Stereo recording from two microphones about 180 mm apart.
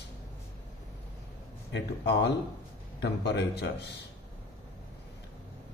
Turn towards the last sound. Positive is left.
turn(degrees=70)  # may be behind; listen again after turning